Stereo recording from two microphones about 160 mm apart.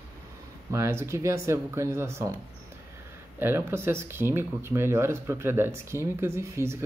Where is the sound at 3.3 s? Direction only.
15° right (ahead or behind).